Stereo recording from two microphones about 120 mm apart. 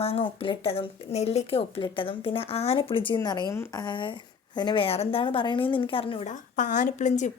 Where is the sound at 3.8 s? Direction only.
40° left (ahead or behind).